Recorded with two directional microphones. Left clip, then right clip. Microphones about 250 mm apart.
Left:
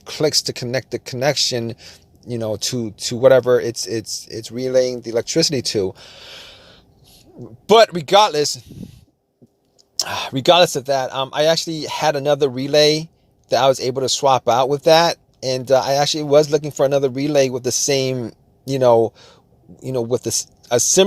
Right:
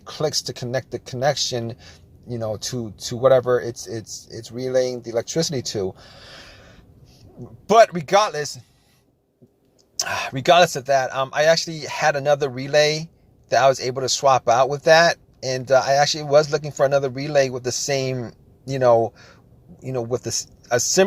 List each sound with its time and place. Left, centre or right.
0.0 s speech: left
7.4 s speech: left
10.0 s speech: left